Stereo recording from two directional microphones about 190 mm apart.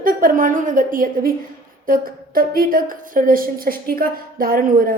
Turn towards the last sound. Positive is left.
turn(degrees=-45)  # may be behind; listen again after turning